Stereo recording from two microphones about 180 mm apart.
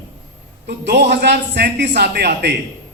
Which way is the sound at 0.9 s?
65° right (ahead or behind).